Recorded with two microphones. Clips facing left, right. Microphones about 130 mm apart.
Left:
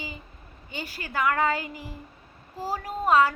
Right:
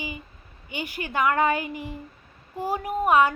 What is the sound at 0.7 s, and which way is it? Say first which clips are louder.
A woman's voice: right 4 dB; 15° right (ahead or behind).